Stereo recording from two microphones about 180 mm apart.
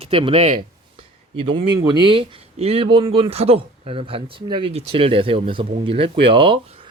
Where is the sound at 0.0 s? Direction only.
30° right (ahead or behind).